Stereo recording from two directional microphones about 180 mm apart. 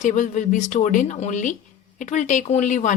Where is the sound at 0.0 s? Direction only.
45° left (ahead or behind).